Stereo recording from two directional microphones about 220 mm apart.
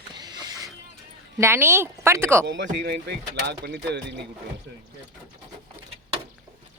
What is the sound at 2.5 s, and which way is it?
Speech, 50° right (ahead or behind).